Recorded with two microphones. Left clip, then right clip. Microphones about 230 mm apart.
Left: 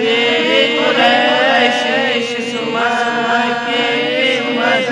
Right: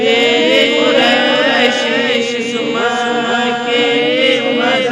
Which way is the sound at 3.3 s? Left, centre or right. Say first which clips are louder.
Right 1 dB; left.